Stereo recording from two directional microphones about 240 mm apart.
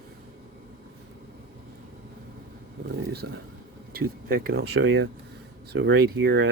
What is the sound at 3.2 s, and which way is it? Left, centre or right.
Speech, right.